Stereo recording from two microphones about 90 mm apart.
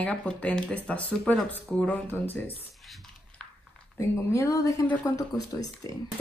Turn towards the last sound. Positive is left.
turn(degrees=40)  # may be behind; listen again after turning